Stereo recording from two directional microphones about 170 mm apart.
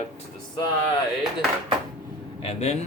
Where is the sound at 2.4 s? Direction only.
40° left (ahead or behind).